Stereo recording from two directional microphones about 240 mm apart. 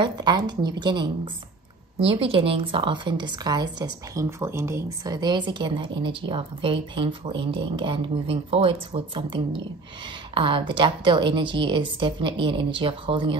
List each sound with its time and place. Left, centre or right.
0.0 s a woman's voice: centre